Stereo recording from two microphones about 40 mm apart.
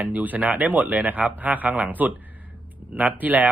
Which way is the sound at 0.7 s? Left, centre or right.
Right.